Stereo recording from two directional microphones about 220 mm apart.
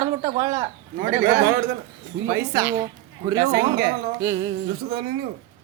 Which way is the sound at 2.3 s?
15° right (ahead or behind).